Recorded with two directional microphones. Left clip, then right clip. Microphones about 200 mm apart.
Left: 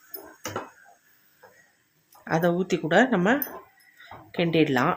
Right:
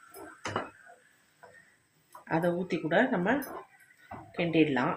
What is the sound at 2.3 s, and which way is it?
Speech, 55° left (ahead or behind).